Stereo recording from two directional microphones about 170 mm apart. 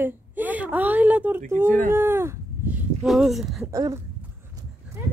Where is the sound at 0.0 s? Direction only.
10° right (ahead or behind).